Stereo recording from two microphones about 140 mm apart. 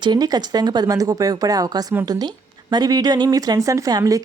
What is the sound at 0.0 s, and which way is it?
A woman's voice, 30° right (ahead or behind).